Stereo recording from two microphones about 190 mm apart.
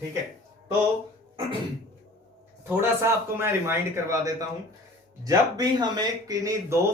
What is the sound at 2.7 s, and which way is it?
Speech, 10° right (ahead or behind).